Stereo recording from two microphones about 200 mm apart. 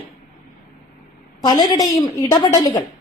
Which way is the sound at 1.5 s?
20° left (ahead or behind).